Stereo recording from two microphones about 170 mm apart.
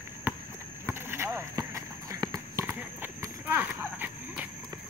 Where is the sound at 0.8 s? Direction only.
15° right (ahead or behind).